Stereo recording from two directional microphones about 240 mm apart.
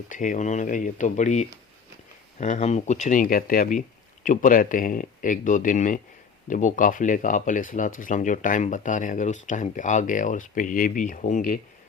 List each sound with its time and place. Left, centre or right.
0.1 s speech: left